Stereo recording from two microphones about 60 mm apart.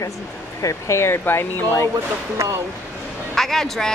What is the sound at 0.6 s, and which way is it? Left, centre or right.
Speech, left.